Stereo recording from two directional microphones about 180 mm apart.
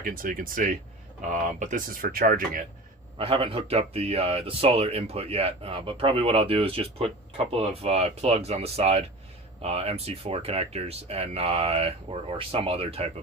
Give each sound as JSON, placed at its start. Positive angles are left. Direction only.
{"t": 0.0, "sound": "speech", "side_deg": -50}
{"t": 3.2, "sound": "speech", "side_deg": -30}